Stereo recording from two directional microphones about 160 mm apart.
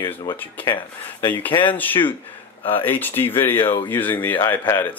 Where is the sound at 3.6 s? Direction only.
35° left (ahead or behind).